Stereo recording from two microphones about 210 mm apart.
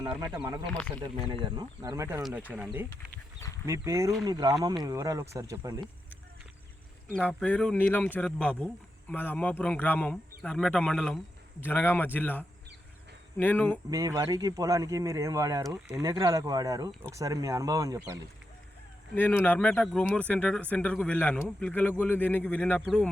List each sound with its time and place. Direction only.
0.3 s speech: 5° right (ahead or behind)
1.0 s speech: 25° right (ahead or behind)
7.2 s speech: 5° left (ahead or behind)
13.9 s speech: 15° right (ahead or behind)
19.1 s speech: 10° left (ahead or behind)